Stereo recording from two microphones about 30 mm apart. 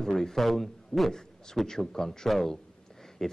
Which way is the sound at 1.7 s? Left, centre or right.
Centre.